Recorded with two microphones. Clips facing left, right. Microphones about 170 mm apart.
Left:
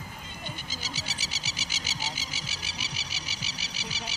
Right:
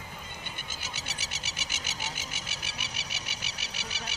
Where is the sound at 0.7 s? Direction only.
55° right (ahead or behind).